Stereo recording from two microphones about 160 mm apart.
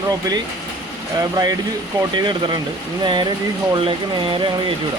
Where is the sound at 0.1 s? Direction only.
25° right (ahead or behind).